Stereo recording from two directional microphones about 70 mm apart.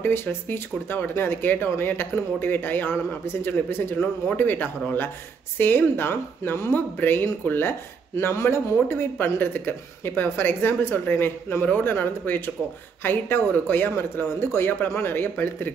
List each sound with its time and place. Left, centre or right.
0.0 s speech: left